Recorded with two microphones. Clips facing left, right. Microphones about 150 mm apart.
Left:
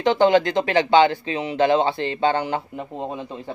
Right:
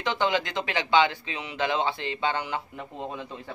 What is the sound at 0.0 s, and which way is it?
A man's voice, 40° left (ahead or behind).